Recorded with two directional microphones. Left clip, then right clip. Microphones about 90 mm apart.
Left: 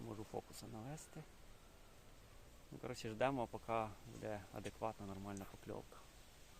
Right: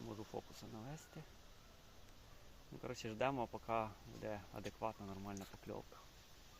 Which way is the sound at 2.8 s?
5° left (ahead or behind).